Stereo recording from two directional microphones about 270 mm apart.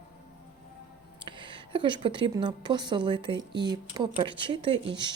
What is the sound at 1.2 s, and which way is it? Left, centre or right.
Speech, centre.